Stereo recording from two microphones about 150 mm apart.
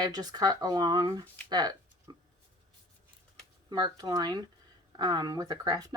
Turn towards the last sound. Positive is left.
turn(degrees=-25)  # may be behind; listen again after turning